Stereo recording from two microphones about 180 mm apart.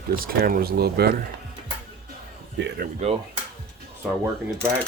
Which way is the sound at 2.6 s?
80° right.